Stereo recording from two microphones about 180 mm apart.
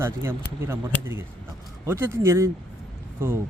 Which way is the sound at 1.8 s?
15° right (ahead or behind).